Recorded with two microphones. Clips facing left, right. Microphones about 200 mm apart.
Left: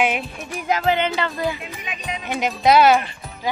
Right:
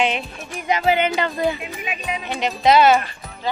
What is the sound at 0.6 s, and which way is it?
Music, centre (ahead or behind).